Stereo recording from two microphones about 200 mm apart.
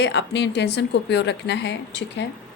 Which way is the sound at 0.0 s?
60° left (ahead or behind).